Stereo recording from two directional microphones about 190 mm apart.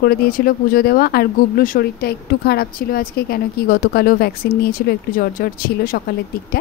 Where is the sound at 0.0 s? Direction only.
50° left (ahead or behind).